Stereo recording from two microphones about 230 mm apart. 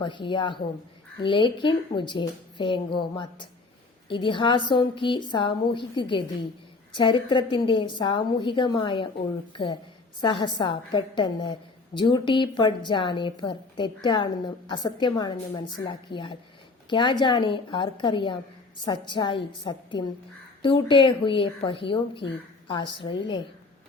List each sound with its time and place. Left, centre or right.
0.0 s a woman's voice: left